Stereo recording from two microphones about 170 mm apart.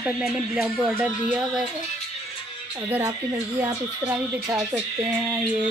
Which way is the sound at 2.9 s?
20° right (ahead or behind).